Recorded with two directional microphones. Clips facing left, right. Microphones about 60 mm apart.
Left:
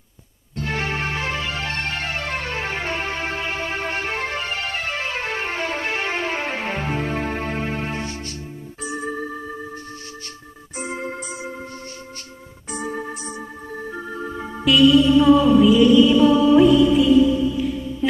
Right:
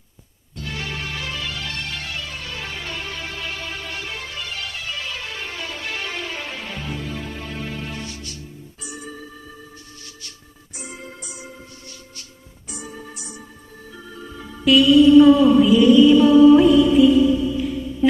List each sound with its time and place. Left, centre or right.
0.5 s music: left
10.8 s music: left
12.7 s organ: left
14.6 s music: centre